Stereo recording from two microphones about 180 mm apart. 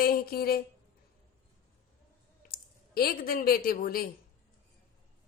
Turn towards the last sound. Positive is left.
turn(degrees=55)  # may be behind; listen again after turning